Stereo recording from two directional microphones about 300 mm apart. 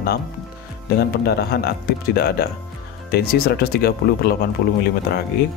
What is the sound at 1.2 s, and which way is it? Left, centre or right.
Speech, left.